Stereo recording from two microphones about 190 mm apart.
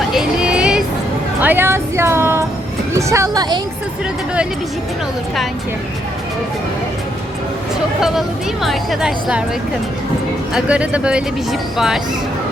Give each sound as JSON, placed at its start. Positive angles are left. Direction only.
{"t": 0.1, "sound": "child singing", "side_deg": -5}
{"t": 1.4, "sound": "speech", "side_deg": -10}
{"t": 8.6, "sound": "a woman's voice", "side_deg": 0}
{"t": 10.5, "sound": "a woman's voice", "side_deg": -5}